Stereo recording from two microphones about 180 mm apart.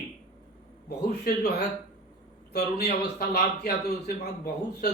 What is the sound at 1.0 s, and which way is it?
Speech, 65° left (ahead or behind).